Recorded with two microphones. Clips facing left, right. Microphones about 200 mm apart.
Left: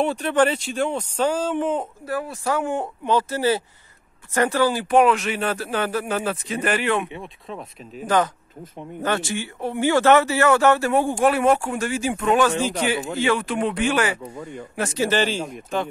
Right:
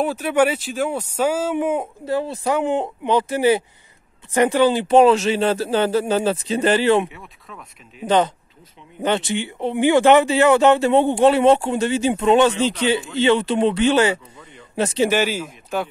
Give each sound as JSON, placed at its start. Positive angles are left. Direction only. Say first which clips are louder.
{"t": 0.0, "sound": "speech", "louder": "right 1 dB", "side_deg": -5}
{"t": 2.0, "sound": "speech", "louder": "right 5 dB", "side_deg": -25}
{"t": 7.1, "sound": "speech", "louder": "left 6 dB", "side_deg": 25}
{"t": 9.0, "sound": "speech", "louder": "right 4 dB", "side_deg": -20}
{"t": 14.3, "sound": "speech", "louder": "left 10 dB", "side_deg": 45}
{"t": 14.8, "sound": "speech", "louder": "right 4 dB", "side_deg": -20}
{"t": 15.1, "sound": "speech", "louder": "right 1 dB", "side_deg": -10}